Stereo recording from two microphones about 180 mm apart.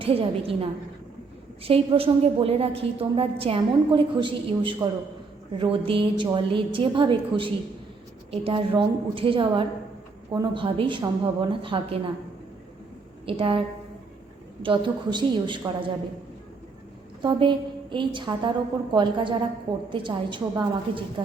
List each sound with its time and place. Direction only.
0.0 s a woman's voice: 30° right (ahead or behind)
13.2 s a woman's voice: 30° right (ahead or behind)
17.2 s a woman's voice: 25° right (ahead or behind)